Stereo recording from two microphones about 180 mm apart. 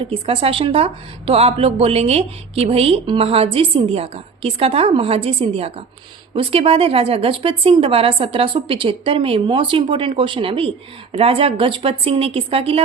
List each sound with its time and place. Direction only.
0.0 s speech: 30° right (ahead or behind)